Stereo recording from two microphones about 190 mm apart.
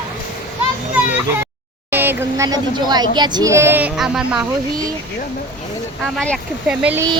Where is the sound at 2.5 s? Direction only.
20° right (ahead or behind); by 4.4 s 5° right (ahead or behind).